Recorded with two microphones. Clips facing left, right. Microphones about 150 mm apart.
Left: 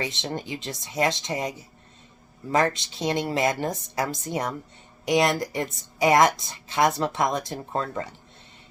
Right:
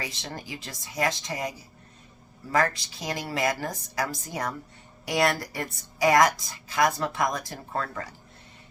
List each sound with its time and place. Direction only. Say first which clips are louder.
0.0 s speech: left 6 dB; 25° left (ahead or behind)